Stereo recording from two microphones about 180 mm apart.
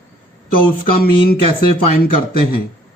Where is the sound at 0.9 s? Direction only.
55° left (ahead or behind).